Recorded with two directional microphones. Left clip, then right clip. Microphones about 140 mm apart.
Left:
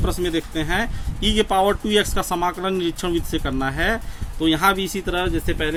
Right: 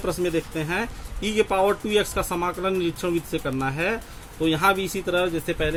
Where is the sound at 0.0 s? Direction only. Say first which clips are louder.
Left 1 dB; 40° left (ahead or behind).